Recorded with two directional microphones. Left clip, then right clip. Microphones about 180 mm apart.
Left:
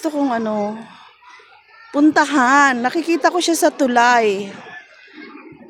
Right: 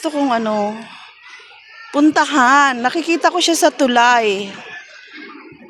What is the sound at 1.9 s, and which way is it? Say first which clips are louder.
A woman's voice: right 1 dB; centre (ahead or behind).